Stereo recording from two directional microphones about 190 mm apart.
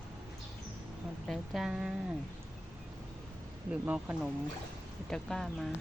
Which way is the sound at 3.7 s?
5° right (ahead or behind).